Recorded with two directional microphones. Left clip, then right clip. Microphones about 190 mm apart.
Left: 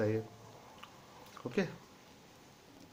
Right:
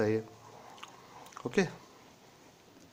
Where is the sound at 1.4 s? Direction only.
40° right (ahead or behind).